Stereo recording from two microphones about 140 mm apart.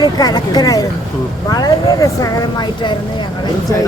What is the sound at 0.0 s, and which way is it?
Speech, 30° left (ahead or behind).